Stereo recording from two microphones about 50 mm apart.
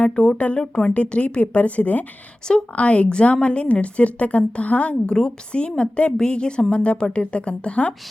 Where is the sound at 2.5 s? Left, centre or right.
Centre.